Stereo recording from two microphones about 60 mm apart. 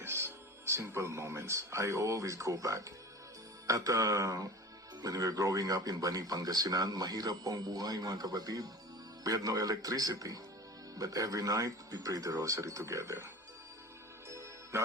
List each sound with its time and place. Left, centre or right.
0.0 s speech: right
5.0 s speech: right
14.3 s music: right